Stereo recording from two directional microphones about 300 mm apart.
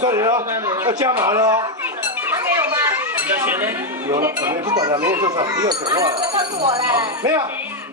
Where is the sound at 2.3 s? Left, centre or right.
Centre.